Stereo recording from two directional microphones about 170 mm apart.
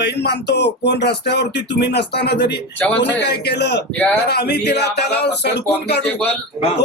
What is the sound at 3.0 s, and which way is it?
Speech, 90° left.